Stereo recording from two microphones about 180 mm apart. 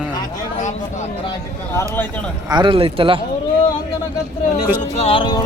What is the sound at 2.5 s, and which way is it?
Speech, 25° right (ahead or behind).